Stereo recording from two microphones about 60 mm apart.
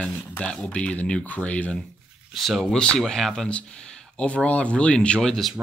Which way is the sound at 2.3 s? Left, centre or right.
Centre.